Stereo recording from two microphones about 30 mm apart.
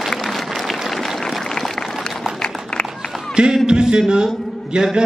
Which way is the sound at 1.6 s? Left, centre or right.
Centre.